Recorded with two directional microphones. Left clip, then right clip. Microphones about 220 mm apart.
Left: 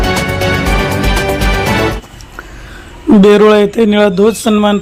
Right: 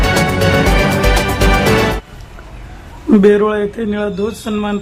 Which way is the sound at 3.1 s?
25° left (ahead or behind).